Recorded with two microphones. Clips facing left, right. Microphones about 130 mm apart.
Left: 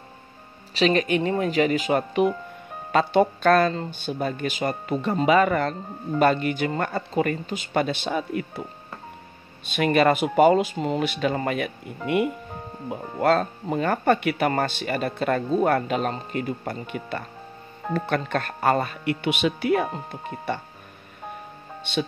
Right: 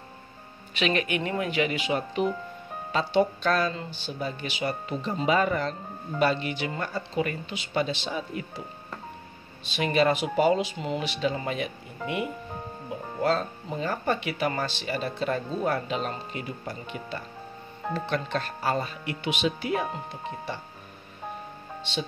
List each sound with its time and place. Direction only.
0.7 s speech: 35° left (ahead or behind); by 8.6 s 55° left (ahead or behind)
9.7 s speech: 55° left (ahead or behind)
12.9 s speech: 55° left (ahead or behind)